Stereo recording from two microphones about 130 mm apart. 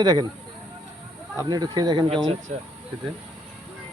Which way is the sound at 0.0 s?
30° right (ahead or behind).